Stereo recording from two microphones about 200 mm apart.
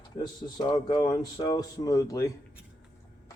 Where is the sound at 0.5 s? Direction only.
20° left (ahead or behind).